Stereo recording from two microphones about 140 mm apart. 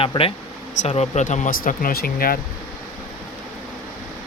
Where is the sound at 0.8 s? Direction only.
55° left (ahead or behind); by 2.4 s 90° left.